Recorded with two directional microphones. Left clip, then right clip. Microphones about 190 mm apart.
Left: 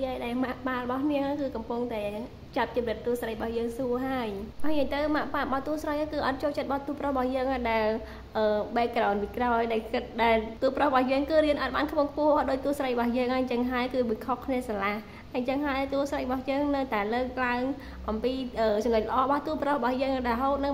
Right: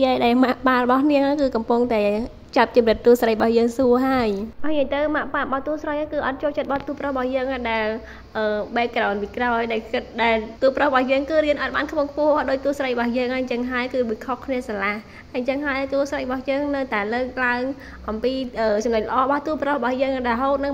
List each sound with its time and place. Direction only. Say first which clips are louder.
0.0 s a woman's voice: right 13 dB; 45° right (ahead or behind)
4.6 s a woman's voice: right 7 dB; 5° right (ahead or behind)